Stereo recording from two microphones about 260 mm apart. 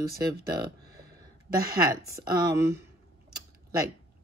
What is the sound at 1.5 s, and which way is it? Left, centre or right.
Speech, right.